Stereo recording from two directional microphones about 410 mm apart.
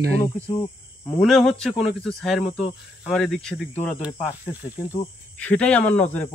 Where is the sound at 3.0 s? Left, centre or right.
Centre.